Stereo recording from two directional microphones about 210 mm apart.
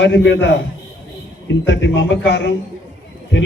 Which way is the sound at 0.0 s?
55° left (ahead or behind).